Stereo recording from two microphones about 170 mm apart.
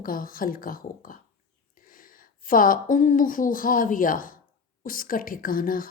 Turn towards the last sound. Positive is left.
turn(degrees=55)  # may be behind; listen again after turning